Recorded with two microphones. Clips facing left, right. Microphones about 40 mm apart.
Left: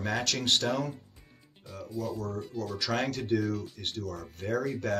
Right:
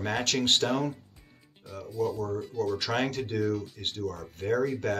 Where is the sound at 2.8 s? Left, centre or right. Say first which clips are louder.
Right 2 dB; right.